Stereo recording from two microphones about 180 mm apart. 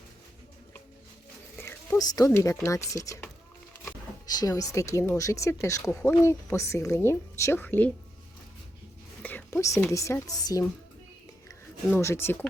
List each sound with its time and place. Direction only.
1.5 s speech: 15° left (ahead or behind)
9.2 s speech: 10° left (ahead or behind)
11.9 s speech: 15° left (ahead or behind)